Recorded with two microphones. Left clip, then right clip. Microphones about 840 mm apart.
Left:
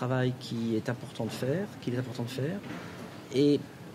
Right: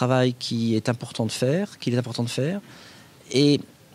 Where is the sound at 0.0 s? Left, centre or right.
Right.